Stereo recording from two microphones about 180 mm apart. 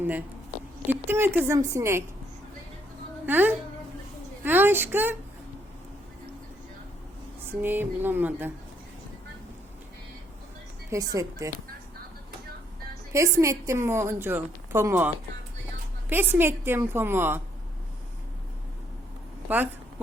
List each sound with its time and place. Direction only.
0.0 s a woman's voice: 10° right (ahead or behind)
3.2 s a woman's voice: 10° right (ahead or behind)
7.6 s a woman's voice: 10° right (ahead or behind)
10.9 s speech: 20° right (ahead or behind)
13.1 s a woman's voice: 15° right (ahead or behind)